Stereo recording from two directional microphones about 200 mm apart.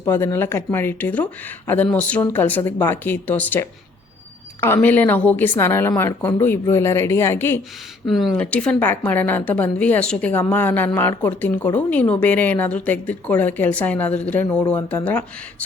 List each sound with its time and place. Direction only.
0.0 s speech: 15° left (ahead or behind)
8.0 s speech: centre (ahead or behind)